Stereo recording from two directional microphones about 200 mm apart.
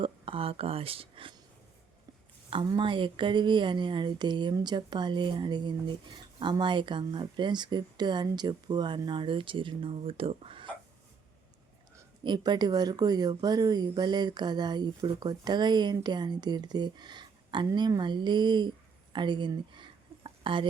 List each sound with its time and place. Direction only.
0.0 s speech: 25° right (ahead or behind)
2.5 s speech: 25° right (ahead or behind)
12.2 s speech: 20° right (ahead or behind)
19.1 s a sound: 25° right (ahead or behind)